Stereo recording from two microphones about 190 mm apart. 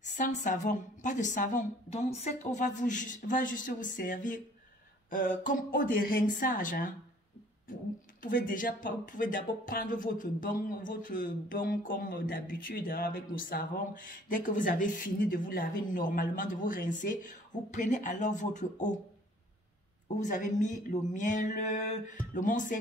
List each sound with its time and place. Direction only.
0.0 s a woman's voice: 40° left (ahead or behind)
8.2 s speech: 45° left (ahead or behind)
20.2 s a woman's voice: 40° left (ahead or behind)